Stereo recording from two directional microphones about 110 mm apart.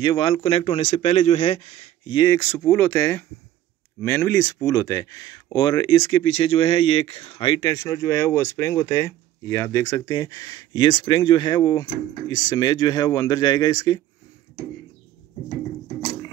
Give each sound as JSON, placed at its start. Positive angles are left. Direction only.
{"t": 0.0, "sound": "speech", "side_deg": 50}
{"t": 2.3, "sound": "speech", "side_deg": 20}
{"t": 7.6, "sound": "speech", "side_deg": 30}